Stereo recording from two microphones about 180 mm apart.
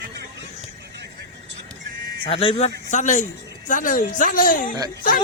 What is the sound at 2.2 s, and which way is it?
Speech, 30° left (ahead or behind).